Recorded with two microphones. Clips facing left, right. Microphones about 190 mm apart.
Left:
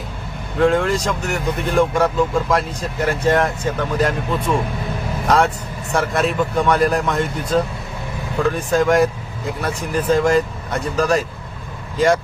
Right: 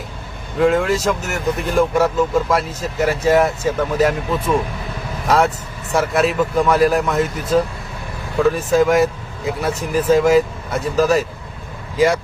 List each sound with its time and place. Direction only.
0.6 s speech: 5° right (ahead or behind)